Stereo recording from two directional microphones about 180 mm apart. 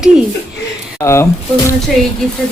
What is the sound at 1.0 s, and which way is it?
Speech, 15° left (ahead or behind).